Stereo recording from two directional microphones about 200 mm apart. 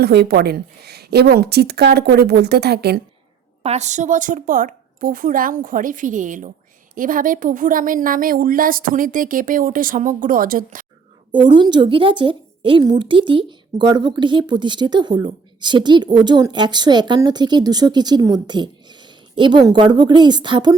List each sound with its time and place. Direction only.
0.0 s a woman's voice: 55° right (ahead or behind)
3.6 s a woman's voice: 35° right (ahead or behind)
11.3 s a woman's voice: 25° right (ahead or behind)